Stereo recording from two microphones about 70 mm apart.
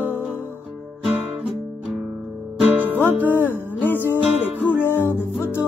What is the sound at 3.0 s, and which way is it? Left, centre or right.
Music, right.